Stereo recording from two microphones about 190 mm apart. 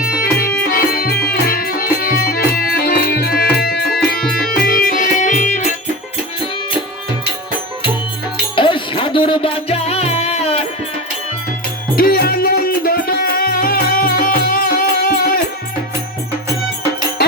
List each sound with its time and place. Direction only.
0.0 s music: 50° left (ahead or behind)
8.5 s music: 25° left (ahead or behind)
11.9 s music: 50° left (ahead or behind)